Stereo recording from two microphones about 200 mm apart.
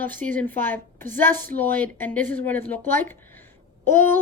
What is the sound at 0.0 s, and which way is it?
Speech, 10° left (ahead or behind).